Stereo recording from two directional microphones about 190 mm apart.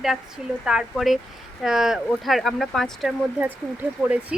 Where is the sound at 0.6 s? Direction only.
5° right (ahead or behind).